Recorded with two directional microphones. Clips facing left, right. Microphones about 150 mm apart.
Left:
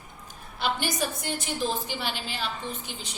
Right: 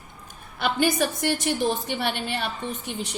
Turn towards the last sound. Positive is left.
turn(degrees=-65)  # may be behind; listen again after turning